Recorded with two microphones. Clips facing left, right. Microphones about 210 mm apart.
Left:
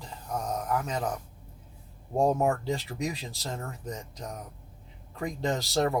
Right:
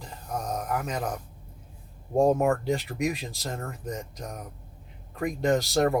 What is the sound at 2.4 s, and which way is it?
Speech, 65° right (ahead or behind).